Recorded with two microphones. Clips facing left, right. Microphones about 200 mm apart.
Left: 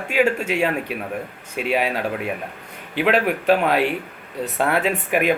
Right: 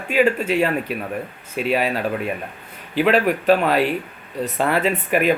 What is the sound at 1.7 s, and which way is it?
A man's voice, 10° left (ahead or behind).